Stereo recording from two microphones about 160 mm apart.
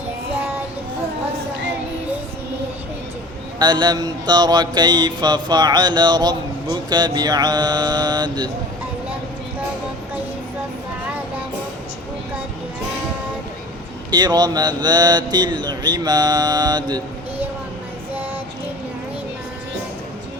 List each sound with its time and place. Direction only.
3.6 s mantra: 25° right (ahead or behind)
14.1 s mantra: 25° right (ahead or behind)